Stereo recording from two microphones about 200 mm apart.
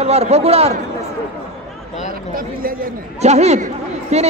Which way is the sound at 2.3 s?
45° right (ahead or behind).